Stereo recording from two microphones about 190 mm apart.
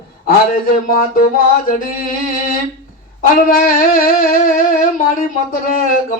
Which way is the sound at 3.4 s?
45° left (ahead or behind).